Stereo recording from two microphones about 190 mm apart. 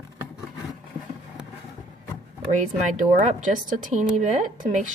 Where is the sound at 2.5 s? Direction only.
40° right (ahead or behind).